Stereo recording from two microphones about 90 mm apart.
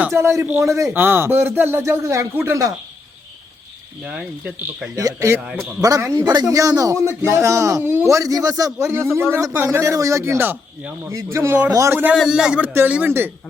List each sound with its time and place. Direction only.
0.1 s speech: 30° right (ahead or behind)
4.0 s speech: 15° right (ahead or behind)
4.9 s speech: 40° right (ahead or behind)
6.1 s a woman's voice: 50° right (ahead or behind)
6.5 s speech: 40° right (ahead or behind); by 9.6 s 25° right (ahead or behind)
9.7 s speech: 35° right (ahead or behind)
11.1 s speech: 35° right (ahead or behind)
11.7 s speech: 35° right (ahead or behind)
12.1 s a man's voice: 5° right (ahead or behind)
12.6 s speech: 20° right (ahead or behind)